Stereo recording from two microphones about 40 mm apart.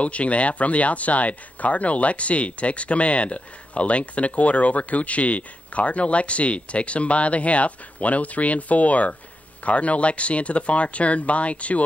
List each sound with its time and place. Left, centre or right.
0.0 s speech: left